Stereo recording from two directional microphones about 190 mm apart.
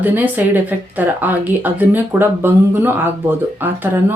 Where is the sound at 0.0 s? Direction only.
10° right (ahead or behind).